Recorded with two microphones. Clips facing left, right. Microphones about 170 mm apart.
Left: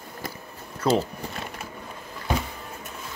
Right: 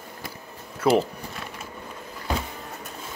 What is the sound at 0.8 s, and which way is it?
Speech, 10° right (ahead or behind).